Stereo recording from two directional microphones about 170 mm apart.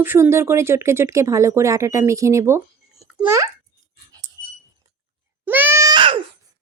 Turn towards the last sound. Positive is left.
turn(degrees=-30)  # may be behind; listen again after turning